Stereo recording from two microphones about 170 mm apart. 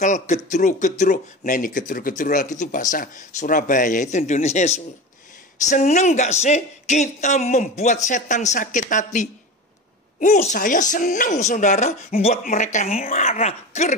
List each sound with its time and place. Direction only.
0.0 s speech: 45° left (ahead or behind)